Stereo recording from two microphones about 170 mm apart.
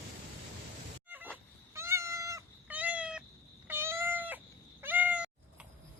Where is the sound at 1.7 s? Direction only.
15° right (ahead or behind).